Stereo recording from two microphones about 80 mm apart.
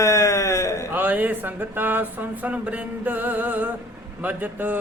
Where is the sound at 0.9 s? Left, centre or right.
Right.